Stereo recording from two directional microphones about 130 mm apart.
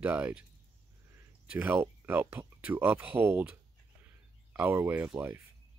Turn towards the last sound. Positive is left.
turn(degrees=-15)  # may be behind; listen again after turning